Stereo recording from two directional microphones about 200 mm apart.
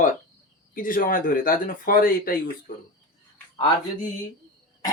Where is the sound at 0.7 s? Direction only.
45° left (ahead or behind).